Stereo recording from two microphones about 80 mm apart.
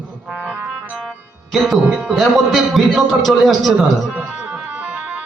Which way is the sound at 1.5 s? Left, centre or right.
Centre.